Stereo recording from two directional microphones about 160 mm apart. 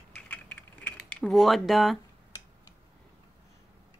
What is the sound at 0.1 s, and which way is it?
Typing, 10° left (ahead or behind).